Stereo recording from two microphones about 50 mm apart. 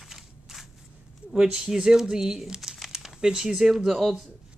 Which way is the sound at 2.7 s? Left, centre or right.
Centre.